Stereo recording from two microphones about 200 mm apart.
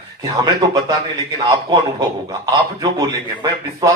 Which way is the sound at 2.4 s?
20° right (ahead or behind).